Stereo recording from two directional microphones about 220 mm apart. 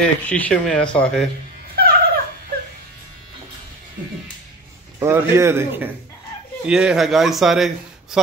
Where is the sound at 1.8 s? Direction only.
45° right (ahead or behind).